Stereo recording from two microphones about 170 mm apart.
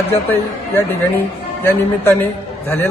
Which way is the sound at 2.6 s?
15° left (ahead or behind).